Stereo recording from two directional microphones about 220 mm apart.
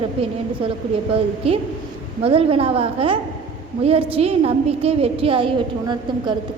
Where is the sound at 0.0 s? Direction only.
25° right (ahead or behind).